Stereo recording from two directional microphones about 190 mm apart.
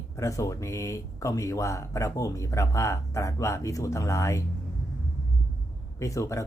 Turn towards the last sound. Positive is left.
turn(degrees=15)  # may be behind; listen again after turning